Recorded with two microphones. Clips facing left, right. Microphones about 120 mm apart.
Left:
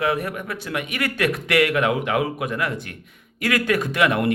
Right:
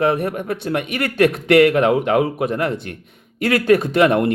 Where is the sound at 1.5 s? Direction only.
30° right (ahead or behind).